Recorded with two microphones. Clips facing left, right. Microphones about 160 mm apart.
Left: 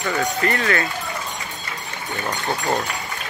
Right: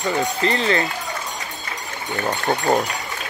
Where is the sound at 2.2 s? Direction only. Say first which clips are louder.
Right 4 dB; 25° right (ahead or behind).